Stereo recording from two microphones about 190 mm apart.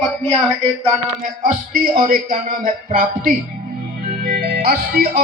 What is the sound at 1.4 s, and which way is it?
Music, 45° right (ahead or behind).